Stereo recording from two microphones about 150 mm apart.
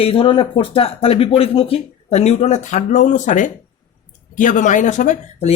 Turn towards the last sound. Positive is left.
turn(degrees=50)  # may be behind; listen again after turning